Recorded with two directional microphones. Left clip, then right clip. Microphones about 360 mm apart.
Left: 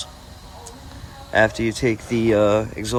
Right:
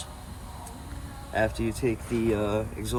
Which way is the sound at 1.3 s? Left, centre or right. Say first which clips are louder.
Left 9 dB; left.